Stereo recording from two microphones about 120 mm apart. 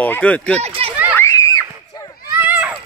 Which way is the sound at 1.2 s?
25° left (ahead or behind).